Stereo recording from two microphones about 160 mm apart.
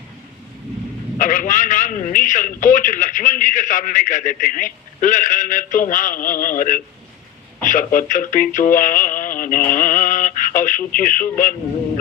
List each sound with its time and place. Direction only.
1.2 s a man's voice: 55° left (ahead or behind)